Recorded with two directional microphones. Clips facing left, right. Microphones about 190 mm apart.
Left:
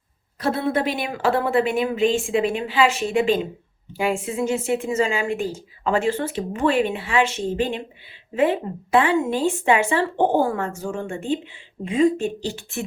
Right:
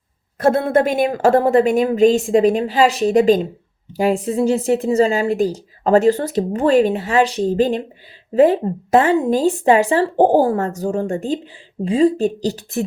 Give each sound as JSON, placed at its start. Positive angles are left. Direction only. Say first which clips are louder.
{"t": 0.3, "sound": "a woman's voice", "louder": "right 7 dB", "side_deg": -50}